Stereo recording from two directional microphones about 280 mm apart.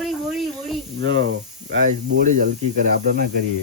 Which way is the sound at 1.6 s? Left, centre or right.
Right.